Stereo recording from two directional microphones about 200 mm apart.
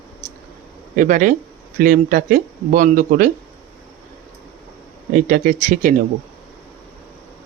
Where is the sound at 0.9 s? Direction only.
40° right (ahead or behind).